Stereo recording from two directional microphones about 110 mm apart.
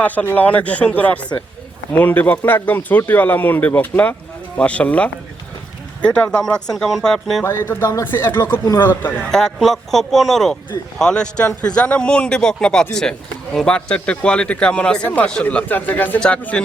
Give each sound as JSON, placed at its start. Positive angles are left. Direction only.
{"t": 0.0, "sound": "speech", "side_deg": 15}
{"t": 7.4, "sound": "speech", "side_deg": 20}
{"t": 9.2, "sound": "speech", "side_deg": 5}